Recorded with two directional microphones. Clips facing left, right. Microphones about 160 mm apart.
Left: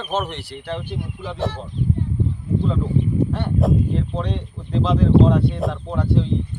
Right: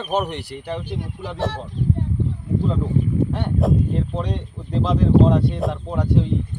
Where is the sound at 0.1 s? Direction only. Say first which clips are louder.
Right 2 dB; 15° right (ahead or behind).